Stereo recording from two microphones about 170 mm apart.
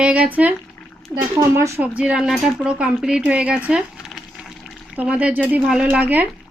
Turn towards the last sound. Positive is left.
turn(degrees=-10)  # may be behind; listen again after turning